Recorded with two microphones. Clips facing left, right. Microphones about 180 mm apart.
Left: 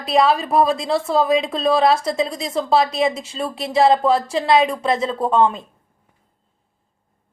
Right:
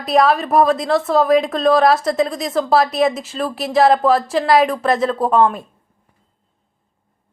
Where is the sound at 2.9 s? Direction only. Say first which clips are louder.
Right 3 dB; 25° left (ahead or behind).